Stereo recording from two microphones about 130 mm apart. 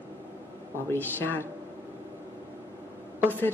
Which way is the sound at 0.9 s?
15° left (ahead or behind).